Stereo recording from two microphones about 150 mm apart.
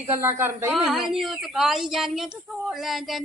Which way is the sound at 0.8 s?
Centre (ahead or behind).